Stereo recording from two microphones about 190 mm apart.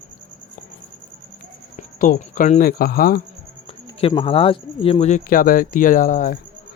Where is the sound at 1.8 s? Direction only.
45° left (ahead or behind).